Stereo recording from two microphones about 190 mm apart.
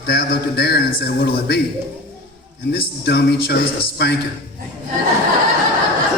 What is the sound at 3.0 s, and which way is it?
A man's voice, 60° left (ahead or behind).